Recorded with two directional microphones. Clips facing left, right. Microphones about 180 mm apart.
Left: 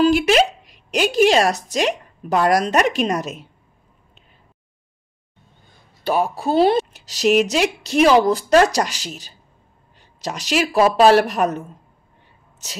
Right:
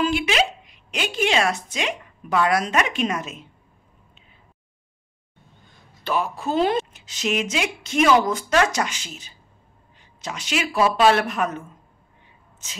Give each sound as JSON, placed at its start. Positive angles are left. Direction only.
{"t": 0.0, "sound": "a sound", "side_deg": 40}
{"t": 0.9, "sound": "a woman's voice", "side_deg": 40}
{"t": 6.0, "sound": "a woman's voice", "side_deg": 35}